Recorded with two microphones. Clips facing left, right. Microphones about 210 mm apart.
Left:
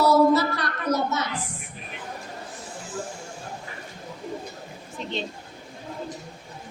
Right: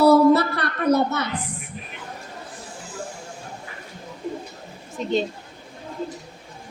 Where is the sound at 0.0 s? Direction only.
60° right (ahead or behind).